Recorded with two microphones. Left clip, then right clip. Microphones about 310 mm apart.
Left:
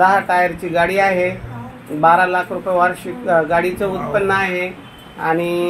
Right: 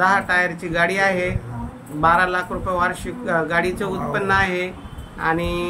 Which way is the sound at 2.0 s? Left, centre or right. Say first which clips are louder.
Left 4 dB; centre.